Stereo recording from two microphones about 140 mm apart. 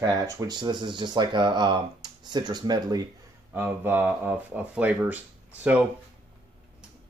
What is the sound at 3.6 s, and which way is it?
Speech, 15° right (ahead or behind).